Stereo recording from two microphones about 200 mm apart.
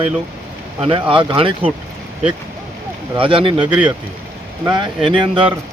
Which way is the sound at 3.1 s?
25° right (ahead or behind).